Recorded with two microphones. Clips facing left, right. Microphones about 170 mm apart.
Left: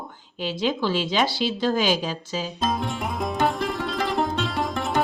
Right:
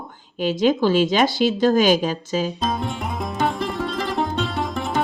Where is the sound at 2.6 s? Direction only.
Centre (ahead or behind).